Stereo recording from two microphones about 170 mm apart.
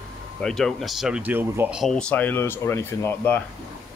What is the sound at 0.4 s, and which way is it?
Speech, 5° left (ahead or behind).